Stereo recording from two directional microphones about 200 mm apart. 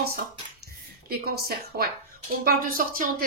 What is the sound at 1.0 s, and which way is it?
Speech, 50° right (ahead or behind).